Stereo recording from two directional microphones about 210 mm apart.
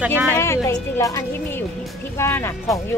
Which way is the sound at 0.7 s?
15° left (ahead or behind).